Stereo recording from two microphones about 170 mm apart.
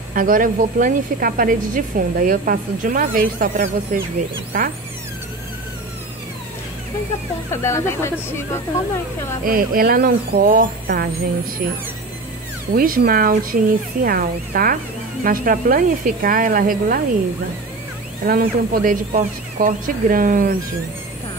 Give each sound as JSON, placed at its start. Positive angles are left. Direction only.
{"t": 0.1, "sound": "a woman's voice", "side_deg": -55}
{"t": 7.5, "sound": "speech", "side_deg": 15}
{"t": 9.4, "sound": "speech", "side_deg": -60}
{"t": 12.7, "sound": "speech", "side_deg": -60}
{"t": 18.2, "sound": "speech", "side_deg": -60}